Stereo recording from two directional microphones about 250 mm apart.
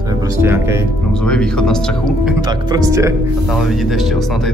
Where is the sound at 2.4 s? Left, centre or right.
Centre.